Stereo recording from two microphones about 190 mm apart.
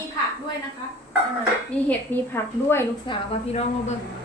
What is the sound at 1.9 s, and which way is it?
Speech, 10° left (ahead or behind).